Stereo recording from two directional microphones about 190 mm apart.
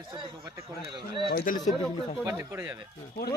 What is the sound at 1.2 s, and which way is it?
Speech, 50° left (ahead or behind).